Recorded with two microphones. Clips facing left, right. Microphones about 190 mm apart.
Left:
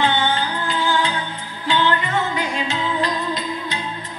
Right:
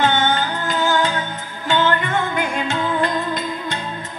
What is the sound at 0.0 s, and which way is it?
Music, 45° right (ahead or behind).